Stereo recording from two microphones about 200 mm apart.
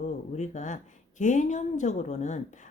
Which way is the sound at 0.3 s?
35° left (ahead or behind).